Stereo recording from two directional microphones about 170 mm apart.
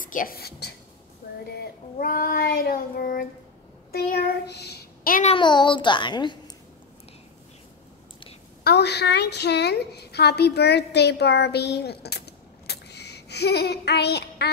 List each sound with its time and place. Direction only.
0.0 s child singing: 55° left (ahead or behind); by 0.7 s 70° left (ahead or behind)
1.6 s child singing: 60° left (ahead or behind)
3.9 s a child's voice: 65° left (ahead or behind)
5.2 s a child's voice: 30° left (ahead or behind)
8.6 s a woman's voice: 75° left (ahead or behind)